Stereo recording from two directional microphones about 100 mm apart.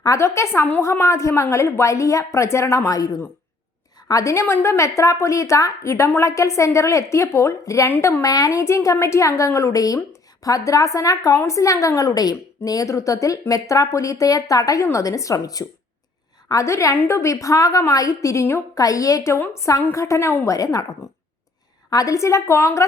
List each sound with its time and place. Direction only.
0.0 s a woman's voice: 30° left (ahead or behind)
7.9 s a woman's voice: 20° left (ahead or behind)
8.2 s a woman's voice: 35° left (ahead or behind)